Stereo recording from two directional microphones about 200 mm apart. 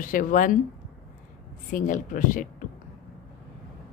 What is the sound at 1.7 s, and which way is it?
Speech, 40° left (ahead or behind).